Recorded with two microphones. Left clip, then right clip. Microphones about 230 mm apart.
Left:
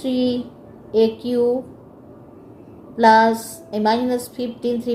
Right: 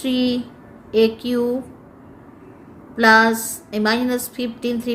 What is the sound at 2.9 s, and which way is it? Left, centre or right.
A woman's voice, right.